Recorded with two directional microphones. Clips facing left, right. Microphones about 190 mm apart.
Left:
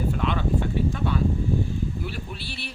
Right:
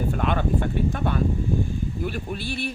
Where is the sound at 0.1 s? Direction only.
50° right (ahead or behind).